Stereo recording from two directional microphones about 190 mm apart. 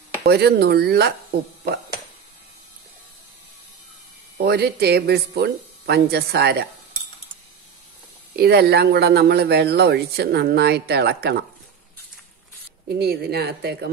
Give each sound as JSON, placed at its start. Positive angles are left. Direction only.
{"t": 0.2, "sound": "speech", "side_deg": -60}
{"t": 4.5, "sound": "speech", "side_deg": -60}
{"t": 8.4, "sound": "speech", "side_deg": -55}
{"t": 12.8, "sound": "speech", "side_deg": -55}